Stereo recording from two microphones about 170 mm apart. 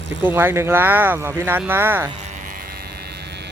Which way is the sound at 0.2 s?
10° right (ahead or behind).